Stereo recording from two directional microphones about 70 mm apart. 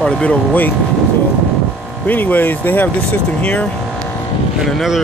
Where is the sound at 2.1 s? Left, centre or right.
Left.